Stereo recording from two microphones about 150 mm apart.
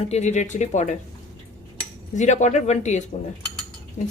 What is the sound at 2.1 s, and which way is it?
Speech, 50° left (ahead or behind).